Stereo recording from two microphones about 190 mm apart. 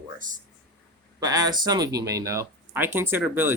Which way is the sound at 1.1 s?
20° right (ahead or behind).